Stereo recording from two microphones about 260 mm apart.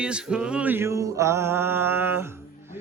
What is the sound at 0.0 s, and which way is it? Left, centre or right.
Mantra, centre.